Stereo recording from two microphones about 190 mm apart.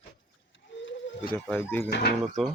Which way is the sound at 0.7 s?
75° left (ahead or behind).